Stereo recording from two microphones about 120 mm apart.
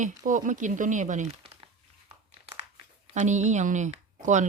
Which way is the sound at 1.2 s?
55° right (ahead or behind).